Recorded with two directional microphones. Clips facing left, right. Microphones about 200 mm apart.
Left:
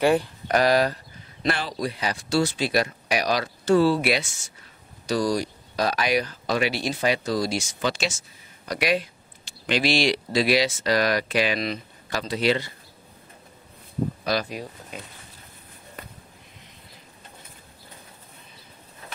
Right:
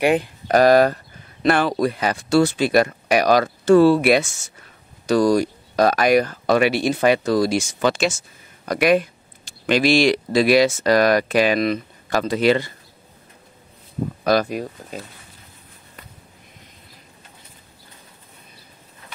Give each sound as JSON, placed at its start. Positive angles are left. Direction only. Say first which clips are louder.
{"t": 0.0, "sound": "speech", "louder": "right 2 dB", "side_deg": -20}
{"t": 0.5, "sound": "speech", "louder": "right 7 dB", "side_deg": -45}
{"t": 14.2, "sound": "speech", "louder": "right 8 dB", "side_deg": -50}